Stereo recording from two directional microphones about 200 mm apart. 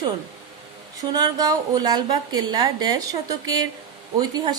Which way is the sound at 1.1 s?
20° right (ahead or behind).